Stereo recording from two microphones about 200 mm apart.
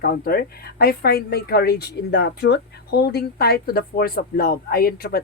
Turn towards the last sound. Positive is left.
turn(degrees=50)  # may be behind; listen again after turning